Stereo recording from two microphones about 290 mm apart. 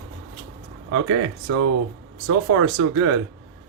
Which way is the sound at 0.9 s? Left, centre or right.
Right.